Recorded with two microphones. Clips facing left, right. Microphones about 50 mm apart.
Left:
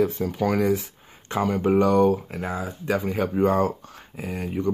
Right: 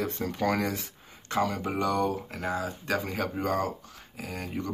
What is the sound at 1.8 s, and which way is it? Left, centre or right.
Speech, left.